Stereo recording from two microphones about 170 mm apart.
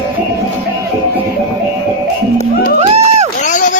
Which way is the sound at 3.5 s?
45° left (ahead or behind).